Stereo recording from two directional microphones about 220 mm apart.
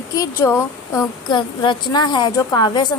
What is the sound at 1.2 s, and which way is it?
A woman's voice, 20° left (ahead or behind).